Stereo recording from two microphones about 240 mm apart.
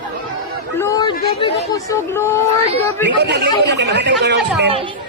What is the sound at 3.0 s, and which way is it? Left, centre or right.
Speech, right.